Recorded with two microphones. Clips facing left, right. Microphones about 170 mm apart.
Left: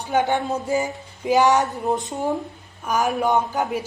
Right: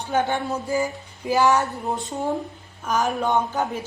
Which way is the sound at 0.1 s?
15° left (ahead or behind).